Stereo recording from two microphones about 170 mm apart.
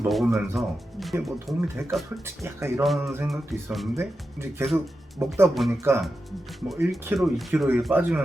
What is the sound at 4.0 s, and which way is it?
Speech, 15° right (ahead or behind).